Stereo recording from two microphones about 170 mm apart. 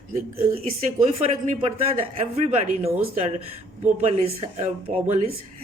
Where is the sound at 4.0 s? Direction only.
40° right (ahead or behind).